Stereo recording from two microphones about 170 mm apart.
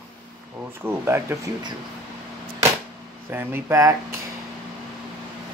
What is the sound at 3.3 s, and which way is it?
Speech, 10° right (ahead or behind).